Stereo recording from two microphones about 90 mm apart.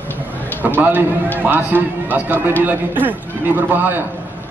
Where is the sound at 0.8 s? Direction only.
20° right (ahead or behind).